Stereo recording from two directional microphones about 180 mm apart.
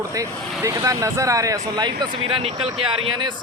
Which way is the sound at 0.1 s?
20° right (ahead or behind).